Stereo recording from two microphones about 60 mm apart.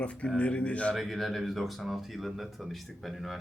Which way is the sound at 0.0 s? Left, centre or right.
Centre.